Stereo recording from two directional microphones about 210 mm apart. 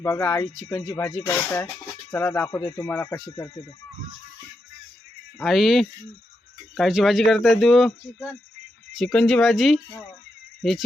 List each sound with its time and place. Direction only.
0.0 s speech: 15° left (ahead or behind)
5.4 s speech: centre (ahead or behind)